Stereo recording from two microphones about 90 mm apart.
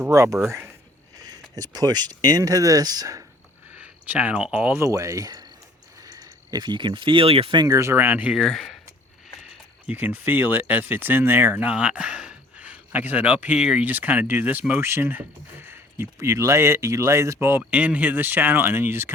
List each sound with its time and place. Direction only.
0.0 s speech: 35° right (ahead or behind)
3.8 s speech: 15° right (ahead or behind)
4.8 s speech: 35° right (ahead or behind); by 7.6 s 85° right
7.7 s speech: 30° right (ahead or behind)
8.4 s speech: centre (ahead or behind)
9.4 s speech: 15° right (ahead or behind)
11.7 s speech: 10° right (ahead or behind)
16.1 s speech: 35° right (ahead or behind)
17.7 s speech: 15° right (ahead or behind)